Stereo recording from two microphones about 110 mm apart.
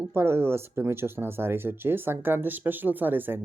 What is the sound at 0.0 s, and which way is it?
Speech, 25° right (ahead or behind).